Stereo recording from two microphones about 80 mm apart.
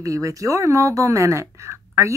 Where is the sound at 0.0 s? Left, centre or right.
Right.